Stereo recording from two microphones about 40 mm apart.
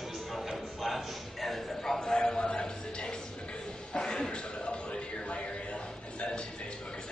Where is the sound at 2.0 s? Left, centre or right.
Left.